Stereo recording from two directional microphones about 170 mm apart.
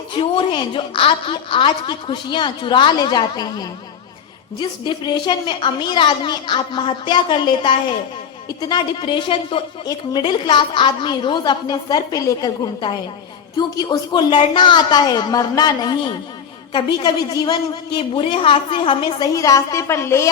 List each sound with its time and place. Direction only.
0.1 s a woman's voice: 30° left (ahead or behind)